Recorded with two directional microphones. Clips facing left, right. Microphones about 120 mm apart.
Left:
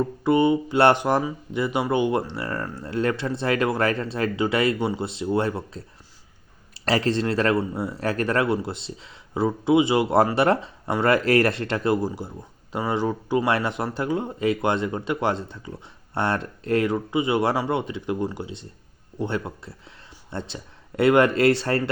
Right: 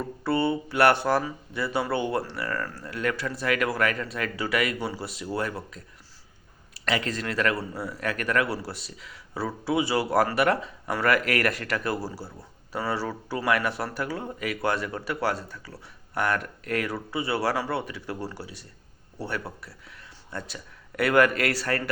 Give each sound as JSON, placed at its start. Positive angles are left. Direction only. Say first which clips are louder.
{"t": 0.3, "sound": "speech", "louder": "left 6 dB", "side_deg": 15}
{"t": 6.8, "sound": "speech", "louder": "left 6 dB", "side_deg": 35}